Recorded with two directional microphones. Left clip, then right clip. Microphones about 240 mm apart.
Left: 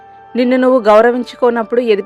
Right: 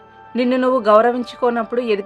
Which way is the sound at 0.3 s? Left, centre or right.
Left.